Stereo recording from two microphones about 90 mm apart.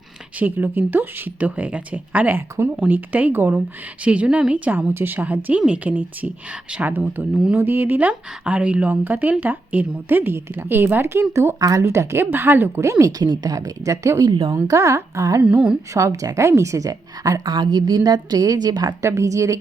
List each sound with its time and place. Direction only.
0.3 s a woman's voice: 20° right (ahead or behind); by 15.4 s 40° right (ahead or behind)
15.4 s a woman's voice: 15° right (ahead or behind)
15.9 s a woman's voice: 35° right (ahead or behind); by 18.9 s 50° right (ahead or behind)
19.0 s a woman's voice: 35° right (ahead or behind)